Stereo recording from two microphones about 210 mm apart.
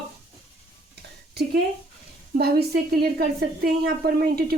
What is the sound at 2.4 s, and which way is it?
A woman's voice, 50° right (ahead or behind).